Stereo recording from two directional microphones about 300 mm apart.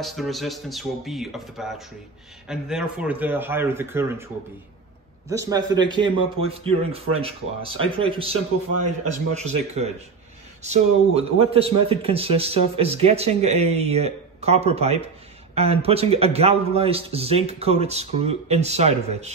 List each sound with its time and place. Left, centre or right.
0.0 s speech: centre
5.3 s a man's voice: centre